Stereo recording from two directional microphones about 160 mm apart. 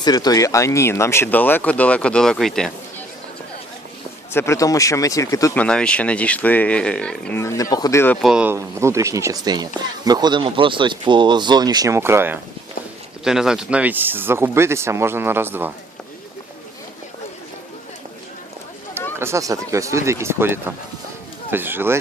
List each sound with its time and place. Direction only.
0.0 s speech: 25° left (ahead or behind); by 2.7 s centre (ahead or behind)
4.3 s speech: 15° left (ahead or behind)
5.5 s speech: 5° left (ahead or behind)
8.2 s speech: 5° right (ahead or behind)
8.5 s speech: 20° right (ahead or behind)
13.2 s speech: 5° right (ahead or behind)
19.2 s speech: 20° right (ahead or behind)